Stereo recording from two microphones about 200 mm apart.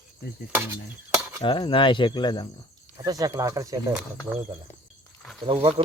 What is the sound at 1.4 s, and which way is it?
Speech, 25° left (ahead or behind).